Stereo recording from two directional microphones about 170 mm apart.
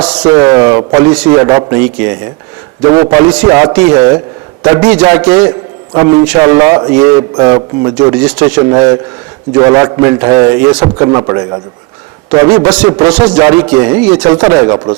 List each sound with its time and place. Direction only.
0.2 s a man's voice: 25° right (ahead or behind)